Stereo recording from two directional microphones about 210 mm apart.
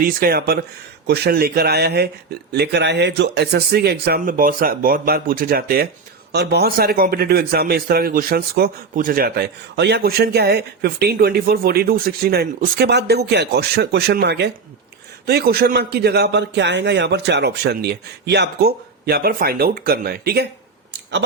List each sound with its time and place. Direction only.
0.0 s a man's voice: 45° right (ahead or behind)